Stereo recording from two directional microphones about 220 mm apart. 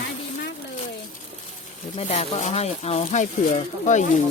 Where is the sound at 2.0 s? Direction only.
30° left (ahead or behind).